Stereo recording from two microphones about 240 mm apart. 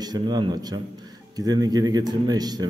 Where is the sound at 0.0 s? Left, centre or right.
Centre.